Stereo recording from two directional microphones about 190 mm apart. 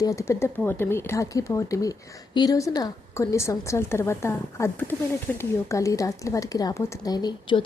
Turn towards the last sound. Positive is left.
turn(degrees=25)  # may be behind; listen again after turning